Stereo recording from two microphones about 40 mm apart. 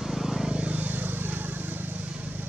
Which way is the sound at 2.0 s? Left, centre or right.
Right.